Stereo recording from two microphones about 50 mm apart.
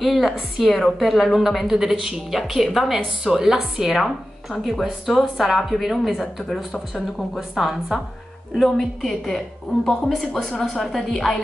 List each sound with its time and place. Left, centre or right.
0.0 s a woman's voice: centre
3.9 s speech: centre
8.5 s speech: centre